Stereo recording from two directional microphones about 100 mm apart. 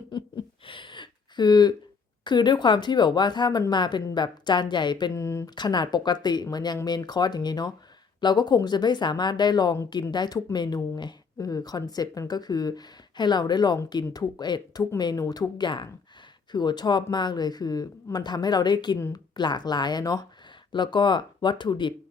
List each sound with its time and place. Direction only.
0.6 s a sound: 55° left (ahead or behind)
2.2 s speech: 50° left (ahead or behind)
5.1 s speech: 30° left (ahead or behind)
5.5 s speech: 45° left (ahead or behind)